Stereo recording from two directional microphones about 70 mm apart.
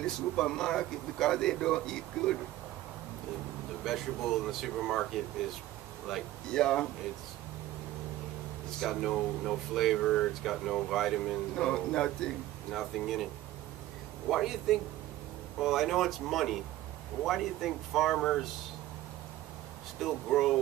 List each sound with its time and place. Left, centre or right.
0.0 s a man's voice: centre
3.8 s a man's voice: centre
8.8 s a man's voice: centre
14.3 s speech: centre
20.0 s speech: centre